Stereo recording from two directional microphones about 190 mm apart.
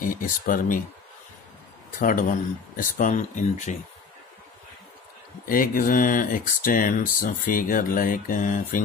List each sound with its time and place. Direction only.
0.0 s speech: 45° left (ahead or behind)
2.0 s speech: 45° left (ahead or behind)
5.4 s speech: 50° left (ahead or behind)